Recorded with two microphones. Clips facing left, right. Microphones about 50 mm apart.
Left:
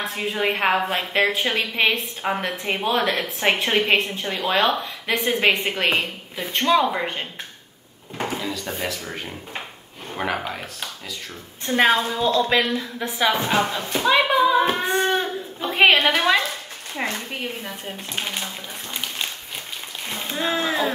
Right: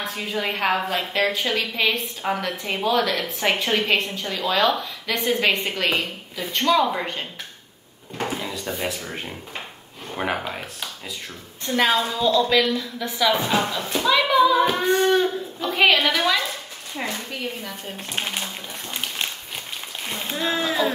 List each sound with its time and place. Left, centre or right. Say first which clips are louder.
0.1 s a woman's voice: left 3 dB; left
6.4 s speech: left 1 dB; centre
10.1 s speech: even; centre
11.6 s a woman's voice: left 2 dB; left
14.2 s singing: right 1 dB; left
15.0 s a sound: right 3 dB; left
16.9 s a woman's voice: left 2 dB; left
18.1 s speech: right 1 dB; centre
20.1 s speech: even; centre
20.3 s speech: left 1 dB; centre